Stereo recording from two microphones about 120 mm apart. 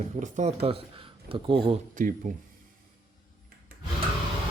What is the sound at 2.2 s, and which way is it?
Speech, 90° right.